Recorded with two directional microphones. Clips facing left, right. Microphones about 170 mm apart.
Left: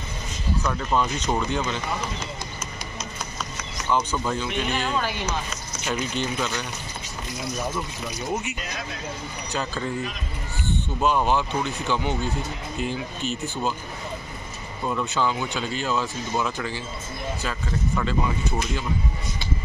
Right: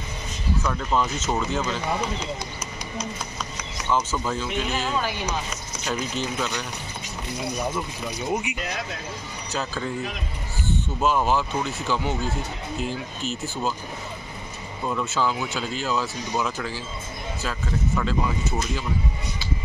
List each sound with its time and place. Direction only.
0.7 s speech: centre (ahead or behind)
3.9 s speech: 5° right (ahead or behind)
8.3 s speech: 15° right (ahead or behind)
9.5 s speech: centre (ahead or behind)
11.0 s speech: centre (ahead or behind)
14.9 s speech: centre (ahead or behind)